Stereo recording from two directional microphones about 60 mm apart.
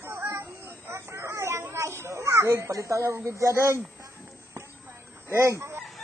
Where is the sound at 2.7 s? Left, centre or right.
Right.